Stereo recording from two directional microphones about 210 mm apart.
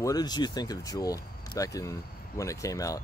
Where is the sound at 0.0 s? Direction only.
20° left (ahead or behind).